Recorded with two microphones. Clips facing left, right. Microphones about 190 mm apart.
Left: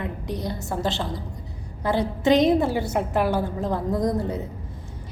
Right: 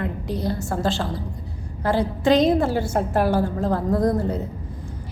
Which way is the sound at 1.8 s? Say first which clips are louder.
Right 2 dB; 20° left (ahead or behind).